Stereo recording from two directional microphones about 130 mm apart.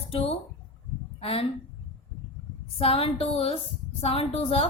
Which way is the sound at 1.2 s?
45° left (ahead or behind).